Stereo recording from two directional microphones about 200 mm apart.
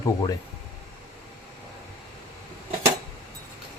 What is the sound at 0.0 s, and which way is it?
Speech, 20° left (ahead or behind).